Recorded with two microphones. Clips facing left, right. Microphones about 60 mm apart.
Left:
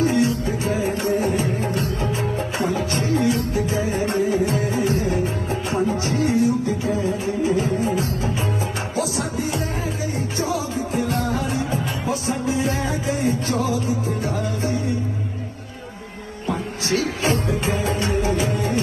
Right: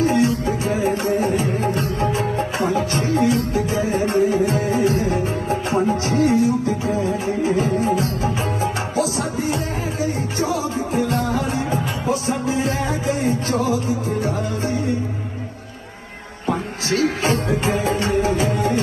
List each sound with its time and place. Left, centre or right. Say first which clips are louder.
0.0 s music: right 2 dB; right
1.6 s music: right 3 dB; right
11.2 s music: right 2 dB; right
16.5 s music: right 2 dB; right